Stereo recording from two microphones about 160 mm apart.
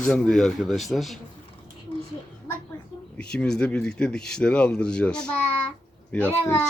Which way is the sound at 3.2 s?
5° left (ahead or behind).